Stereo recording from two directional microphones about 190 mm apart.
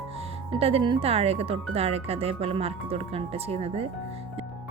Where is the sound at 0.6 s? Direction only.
30° right (ahead or behind).